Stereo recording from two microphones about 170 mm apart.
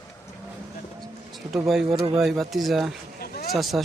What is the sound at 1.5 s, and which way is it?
Speech, 5° right (ahead or behind).